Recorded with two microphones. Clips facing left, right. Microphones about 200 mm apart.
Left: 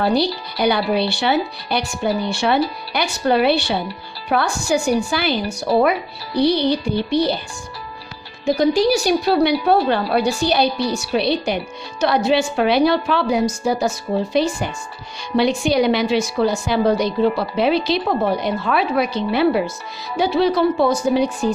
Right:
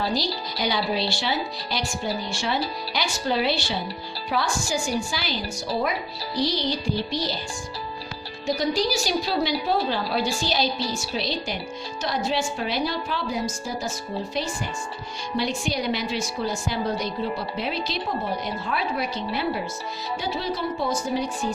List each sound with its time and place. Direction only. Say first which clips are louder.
0.0 s speech: left 8 dB; 60° left (ahead or behind)
8.4 s a woman's voice: left 8 dB; 55° left (ahead or behind)